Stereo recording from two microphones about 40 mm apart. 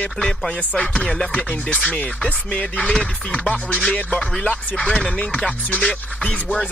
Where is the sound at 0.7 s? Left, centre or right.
Left.